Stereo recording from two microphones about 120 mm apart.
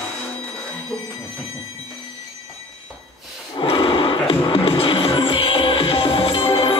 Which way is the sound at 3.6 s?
45° left (ahead or behind).